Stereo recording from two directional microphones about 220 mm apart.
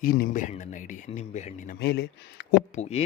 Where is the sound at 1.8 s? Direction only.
50° left (ahead or behind).